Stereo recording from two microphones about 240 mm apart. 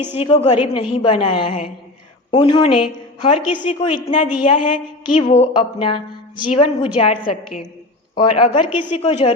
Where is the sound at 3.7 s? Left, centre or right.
Left.